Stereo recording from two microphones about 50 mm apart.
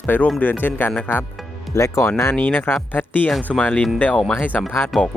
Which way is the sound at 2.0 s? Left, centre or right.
Left.